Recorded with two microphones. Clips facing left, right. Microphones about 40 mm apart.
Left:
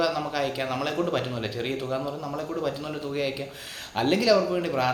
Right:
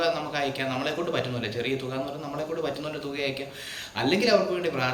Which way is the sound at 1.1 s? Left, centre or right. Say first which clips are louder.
Even; right.